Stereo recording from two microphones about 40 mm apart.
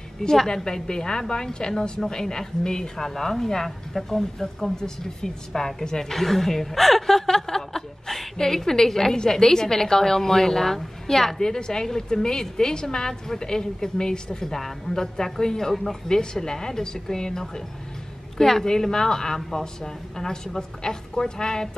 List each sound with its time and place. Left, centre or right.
0.2 s a woman's voice: centre
16.1 s a woman's voice: centre